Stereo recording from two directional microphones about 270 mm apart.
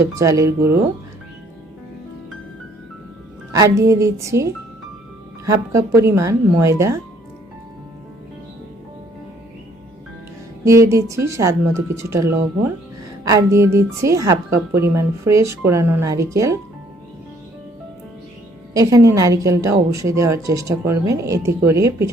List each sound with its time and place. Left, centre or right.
0.2 s speech: centre
3.5 s speech: centre
10.7 s speech: centre
18.7 s speech: centre